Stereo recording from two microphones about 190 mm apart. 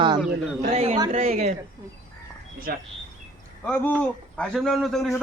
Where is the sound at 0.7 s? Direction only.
35° right (ahead or behind).